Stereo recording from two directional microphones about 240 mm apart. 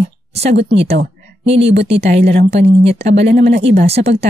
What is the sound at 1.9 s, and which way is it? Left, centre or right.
A woman's voice, right.